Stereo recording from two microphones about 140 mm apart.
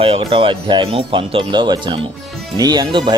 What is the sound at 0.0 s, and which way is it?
Speech, 40° right (ahead or behind).